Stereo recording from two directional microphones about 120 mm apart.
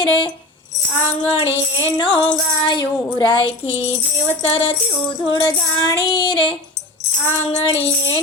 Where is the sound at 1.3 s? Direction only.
50° left (ahead or behind).